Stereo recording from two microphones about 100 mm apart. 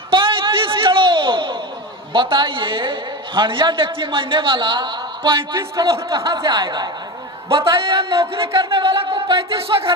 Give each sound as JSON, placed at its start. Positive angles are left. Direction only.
{"t": 0.1, "sound": "a sound", "side_deg": -60}
{"t": 2.1, "sound": "a man's voice", "side_deg": -55}
{"t": 5.5, "sound": "a man's voice", "side_deg": -30}
{"t": 6.5, "sound": "a woman's voice", "side_deg": -50}
{"t": 7.7, "sound": "a man's voice", "side_deg": -60}
{"t": 8.4, "sound": "a sound", "side_deg": -60}
{"t": 9.2, "sound": "speech", "side_deg": -60}